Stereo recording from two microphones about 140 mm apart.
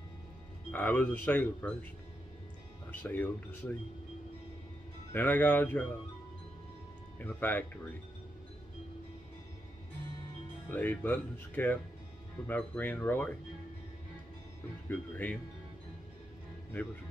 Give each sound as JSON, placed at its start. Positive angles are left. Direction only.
{"t": 0.7, "sound": "speech", "side_deg": 10}
{"t": 2.9, "sound": "speech", "side_deg": 10}
{"t": 5.1, "sound": "speech", "side_deg": 10}
{"t": 7.2, "sound": "speech", "side_deg": 15}
{"t": 10.7, "sound": "speech", "side_deg": 10}
{"t": 14.9, "sound": "speech", "side_deg": 10}